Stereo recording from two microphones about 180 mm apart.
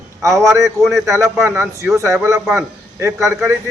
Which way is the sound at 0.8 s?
Centre (ahead or behind).